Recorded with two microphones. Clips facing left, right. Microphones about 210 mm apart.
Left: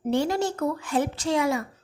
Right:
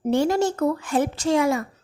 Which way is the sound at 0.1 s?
45° right (ahead or behind).